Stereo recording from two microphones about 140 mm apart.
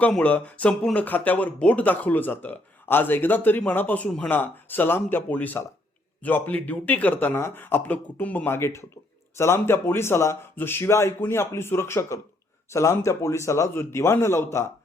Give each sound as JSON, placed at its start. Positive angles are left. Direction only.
{"t": 0.0, "sound": "a man's voice", "side_deg": 10}